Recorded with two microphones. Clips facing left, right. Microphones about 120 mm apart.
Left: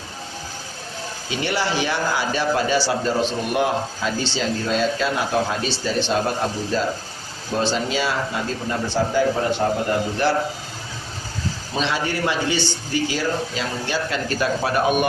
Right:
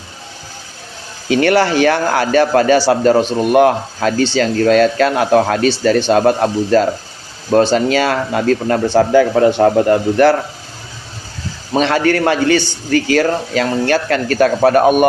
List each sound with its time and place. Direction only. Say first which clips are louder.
1.3 s a man's voice: right 11 dB; 65° right (ahead or behind); by 9.7 s 90° right
10.2 s a man's voice: right 11 dB; 65° right (ahead or behind)
11.7 s a man's voice: right 11 dB; 60° right (ahead or behind)